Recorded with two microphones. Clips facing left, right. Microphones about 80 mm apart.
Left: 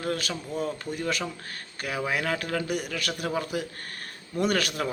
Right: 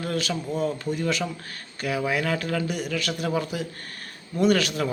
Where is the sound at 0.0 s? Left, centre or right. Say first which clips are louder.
Right 2 dB; left.